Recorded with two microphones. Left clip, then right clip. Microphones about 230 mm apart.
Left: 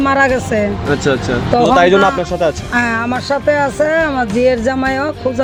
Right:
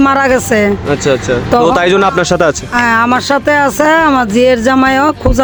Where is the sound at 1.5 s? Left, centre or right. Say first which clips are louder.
Even; right.